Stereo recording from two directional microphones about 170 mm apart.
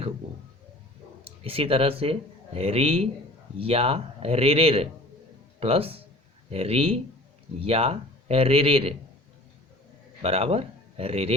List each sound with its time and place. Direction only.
1.5 s a man's voice: 35° right (ahead or behind)
10.2 s speech: 35° right (ahead or behind)